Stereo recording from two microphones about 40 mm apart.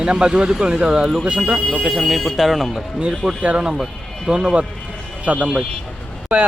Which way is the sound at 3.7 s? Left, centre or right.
Centre.